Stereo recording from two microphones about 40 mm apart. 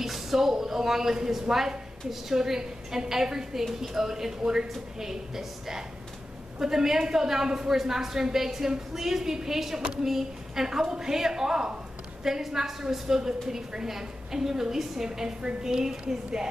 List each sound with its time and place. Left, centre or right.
0.0 s a woman's voice: centre